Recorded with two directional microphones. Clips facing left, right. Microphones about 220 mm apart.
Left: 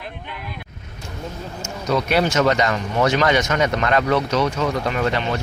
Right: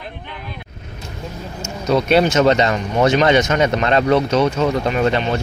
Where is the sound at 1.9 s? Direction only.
25° right (ahead or behind).